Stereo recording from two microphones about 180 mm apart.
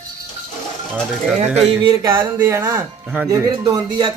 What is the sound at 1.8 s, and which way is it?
A man's voice, 20° right (ahead or behind).